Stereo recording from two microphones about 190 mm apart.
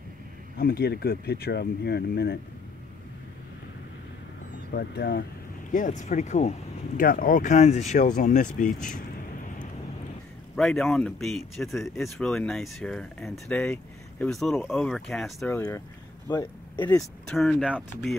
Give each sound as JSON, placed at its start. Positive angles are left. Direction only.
{"t": 0.6, "sound": "speech", "side_deg": 55}
{"t": 4.7, "sound": "speech", "side_deg": 55}
{"t": 5.7, "sound": "speech", "side_deg": 40}
{"t": 10.5, "sound": "speech", "side_deg": 0}
{"t": 15.5, "sound": "speech", "side_deg": 15}
{"t": 17.3, "sound": "speech", "side_deg": 5}